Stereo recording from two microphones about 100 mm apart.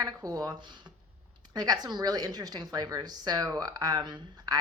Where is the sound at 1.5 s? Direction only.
40° right (ahead or behind).